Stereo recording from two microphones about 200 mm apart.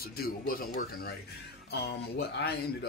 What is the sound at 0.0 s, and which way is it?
Speech, 50° left (ahead or behind).